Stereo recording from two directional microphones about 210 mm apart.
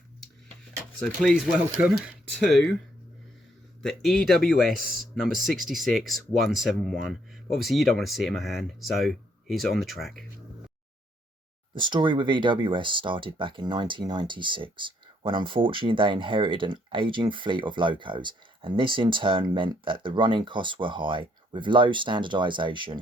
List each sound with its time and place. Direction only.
1.0 s speech: 5° left (ahead or behind)
3.8 s speech: centre (ahead or behind)
11.7 s speech: 20° right (ahead or behind)